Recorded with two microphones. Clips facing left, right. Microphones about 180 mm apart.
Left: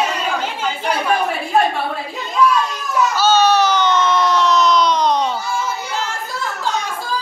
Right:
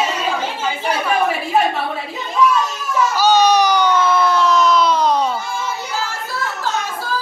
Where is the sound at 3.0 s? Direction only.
15° right (ahead or behind).